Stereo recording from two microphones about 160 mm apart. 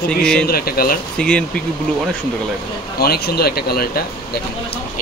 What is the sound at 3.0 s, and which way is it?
Speech, 75° left (ahead or behind).